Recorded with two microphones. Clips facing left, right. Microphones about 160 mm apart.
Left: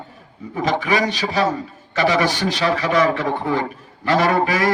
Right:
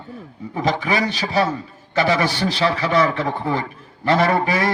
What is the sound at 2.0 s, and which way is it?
Speech, 30° right (ahead or behind).